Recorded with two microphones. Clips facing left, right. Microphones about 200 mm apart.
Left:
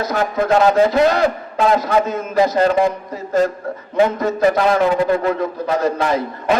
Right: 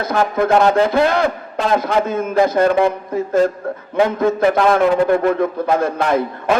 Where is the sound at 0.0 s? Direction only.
55° right (ahead or behind).